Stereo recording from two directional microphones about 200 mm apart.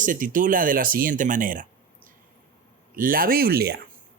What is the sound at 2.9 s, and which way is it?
Speech, 45° right (ahead or behind).